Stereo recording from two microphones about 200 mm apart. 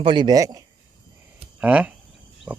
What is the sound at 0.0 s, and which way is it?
Speech, 25° right (ahead or behind).